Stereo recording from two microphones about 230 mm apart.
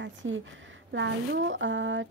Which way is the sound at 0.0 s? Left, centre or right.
Right.